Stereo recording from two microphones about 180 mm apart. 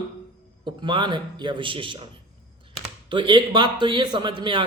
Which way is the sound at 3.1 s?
25° right (ahead or behind).